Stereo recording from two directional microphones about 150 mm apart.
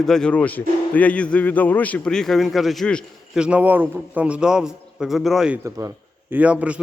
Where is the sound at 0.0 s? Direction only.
5° left (ahead or behind).